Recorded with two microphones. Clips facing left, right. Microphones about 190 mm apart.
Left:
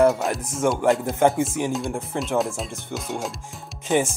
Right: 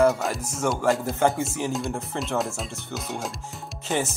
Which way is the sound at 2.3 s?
Centre (ahead or behind).